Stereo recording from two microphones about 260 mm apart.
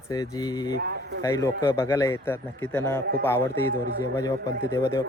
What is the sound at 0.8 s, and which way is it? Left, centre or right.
Speech, right.